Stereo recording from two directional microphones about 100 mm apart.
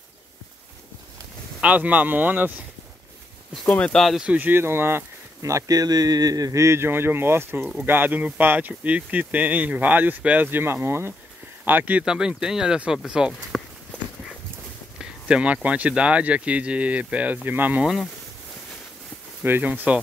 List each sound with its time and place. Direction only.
1.6 s speech: 15° right (ahead or behind)
3.7 s speech: 10° left (ahead or behind)
4.3 s speech: 20° right (ahead or behind)
13.5 s walk: 5° left (ahead or behind)
15.0 s speech: 10° right (ahead or behind)
19.4 s speech: 20° right (ahead or behind)